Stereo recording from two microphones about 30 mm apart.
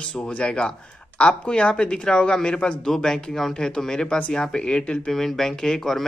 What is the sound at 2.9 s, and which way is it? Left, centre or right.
Speech, centre.